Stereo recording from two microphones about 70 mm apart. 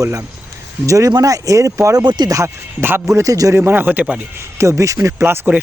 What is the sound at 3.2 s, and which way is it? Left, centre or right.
Speech, right.